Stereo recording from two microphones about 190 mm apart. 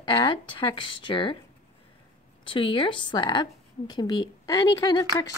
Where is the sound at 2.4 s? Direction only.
25° left (ahead or behind).